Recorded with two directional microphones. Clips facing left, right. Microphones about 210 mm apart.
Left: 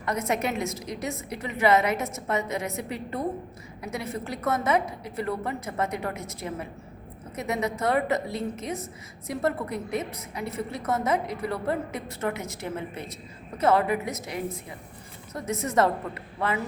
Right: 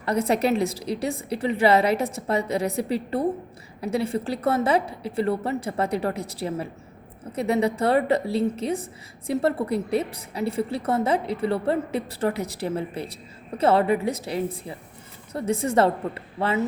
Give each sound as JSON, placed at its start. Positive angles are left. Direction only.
{"t": 0.0, "sound": "a woman's voice", "side_deg": -30}